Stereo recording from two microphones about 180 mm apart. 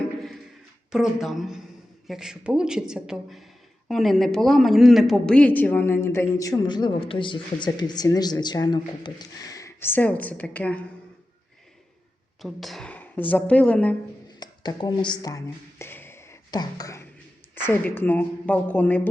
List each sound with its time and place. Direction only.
0.9 s a man's voice: centre (ahead or behind)
12.4 s a man's voice: centre (ahead or behind)
14.3 s a man's voice: 25° left (ahead or behind)